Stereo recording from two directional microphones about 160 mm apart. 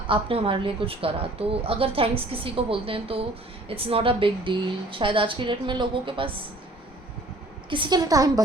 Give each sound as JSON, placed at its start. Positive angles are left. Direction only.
{"t": 0.1, "sound": "a woman's voice", "side_deg": -35}
{"t": 7.7, "sound": "a woman's voice", "side_deg": -30}